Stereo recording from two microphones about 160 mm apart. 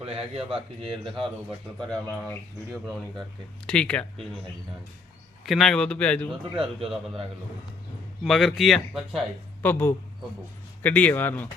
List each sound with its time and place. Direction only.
0.0 s a man's voice: 35° right (ahead or behind)
1.9 s speech: 5° left (ahead or behind)
3.7 s speech: 5° left (ahead or behind)
5.5 s speech: centre (ahead or behind)
8.2 s speech: centre (ahead or behind)
9.6 s speech: 15° left (ahead or behind)